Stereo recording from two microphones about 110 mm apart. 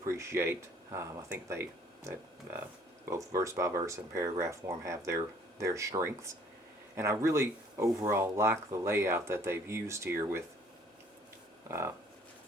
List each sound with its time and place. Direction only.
0.0 s speech: 25° right (ahead or behind)
3.1 s speech: 30° right (ahead or behind)